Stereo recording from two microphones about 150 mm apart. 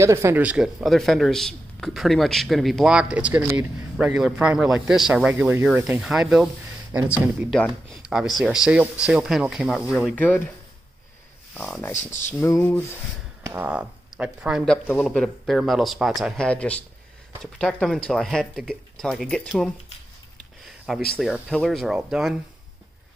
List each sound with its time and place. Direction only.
0.0 s a man's voice: 20° right (ahead or behind); by 6.5 s 5° right (ahead or behind)
7.5 s a man's voice: centre (ahead or behind)
10.1 s a sound: 10° left (ahead or behind)
11.5 s speech: 5° left (ahead or behind)
11.9 s speech: 55° left (ahead or behind)
12.3 s a sound: 15° left (ahead or behind)
13.5 s speech: 10° right (ahead or behind)
14.6 s a man's voice: 5° left (ahead or behind)
20.6 s a sound: centre (ahead or behind)
21.2 s a man's voice: centre (ahead or behind)